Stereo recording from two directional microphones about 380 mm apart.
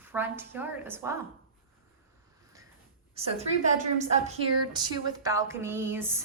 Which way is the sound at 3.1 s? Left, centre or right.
Centre.